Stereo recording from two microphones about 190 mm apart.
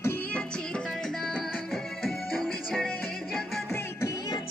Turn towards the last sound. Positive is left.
turn(degrees=15)  # may be behind; listen again after turning